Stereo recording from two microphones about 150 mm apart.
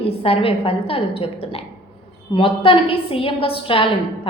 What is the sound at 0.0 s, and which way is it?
A woman's voice, 40° left (ahead or behind).